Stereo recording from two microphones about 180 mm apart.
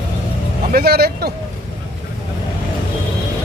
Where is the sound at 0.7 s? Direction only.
60° right (ahead or behind).